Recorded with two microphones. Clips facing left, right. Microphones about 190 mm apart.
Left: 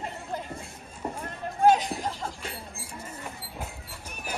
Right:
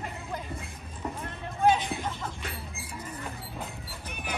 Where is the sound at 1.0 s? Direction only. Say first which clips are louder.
Left 2 dB; 30° left (ahead or behind).